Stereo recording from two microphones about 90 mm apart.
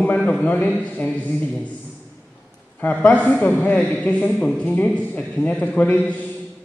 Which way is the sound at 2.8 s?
15° left (ahead or behind).